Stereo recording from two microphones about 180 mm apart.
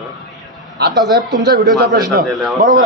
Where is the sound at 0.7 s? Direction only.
65° right (ahead or behind).